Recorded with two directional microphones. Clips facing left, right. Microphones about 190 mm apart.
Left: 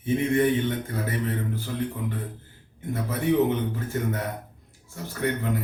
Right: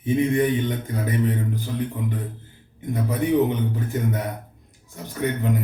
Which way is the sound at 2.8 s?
15° right (ahead or behind).